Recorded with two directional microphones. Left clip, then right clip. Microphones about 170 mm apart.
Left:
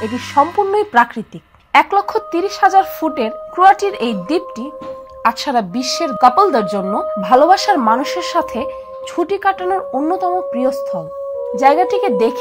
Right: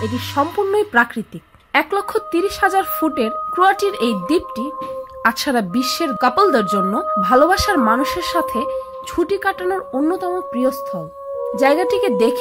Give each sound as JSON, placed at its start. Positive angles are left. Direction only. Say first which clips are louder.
{"t": 0.4, "sound": "speech", "louder": "left 4 dB", "side_deg": -35}
{"t": 5.2, "sound": "speech", "louder": "left 2 dB", "side_deg": -45}
{"t": 6.0, "sound": "speech", "louder": "left 5 dB", "side_deg": -35}